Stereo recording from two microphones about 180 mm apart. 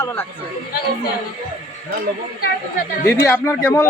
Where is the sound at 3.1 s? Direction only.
15° left (ahead or behind).